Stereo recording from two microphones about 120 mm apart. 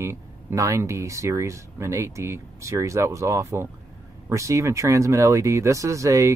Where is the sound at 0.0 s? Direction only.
25° right (ahead or behind).